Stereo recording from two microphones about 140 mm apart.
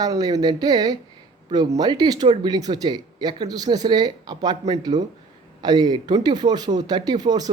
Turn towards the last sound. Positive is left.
turn(degrees=-30)  # may be behind; listen again after turning